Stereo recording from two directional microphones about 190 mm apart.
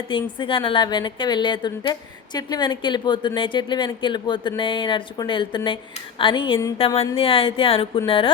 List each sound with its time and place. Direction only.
0.1 s speech: 25° left (ahead or behind)